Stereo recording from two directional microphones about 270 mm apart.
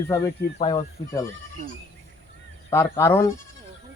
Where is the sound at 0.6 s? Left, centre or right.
Centre.